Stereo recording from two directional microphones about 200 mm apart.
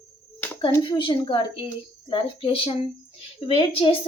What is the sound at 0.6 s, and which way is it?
Speech, 25° left (ahead or behind).